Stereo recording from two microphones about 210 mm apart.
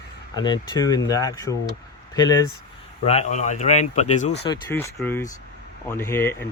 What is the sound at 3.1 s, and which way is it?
Speech, 35° left (ahead or behind).